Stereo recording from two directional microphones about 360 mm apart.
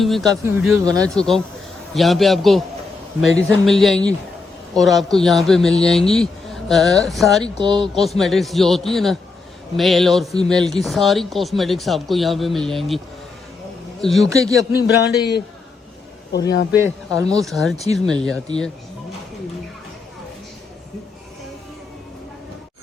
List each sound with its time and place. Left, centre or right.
0.0 s speech: centre
7.6 s speech: centre
7.9 s speech: centre
14.0 s speech: centre
14.8 s a man's voice: left
16.7 s speech: centre